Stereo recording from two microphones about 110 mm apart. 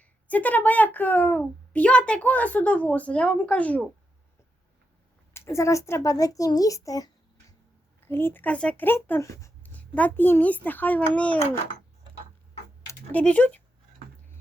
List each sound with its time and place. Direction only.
0.0 s a woman's voice: 15° left (ahead or behind)
5.3 s a child's voice: 25° left (ahead or behind)
8.0 s speech: 20° left (ahead or behind)
9.6 s a woman's voice: 15° left (ahead or behind)
12.9 s speech: 15° left (ahead or behind)